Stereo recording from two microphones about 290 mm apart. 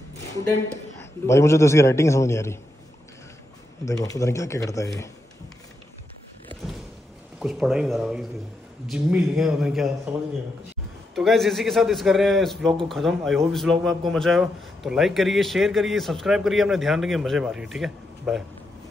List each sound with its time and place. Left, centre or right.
1.2 s a man's voice: centre
3.8 s a man's voice: centre
7.3 s a man's voice: centre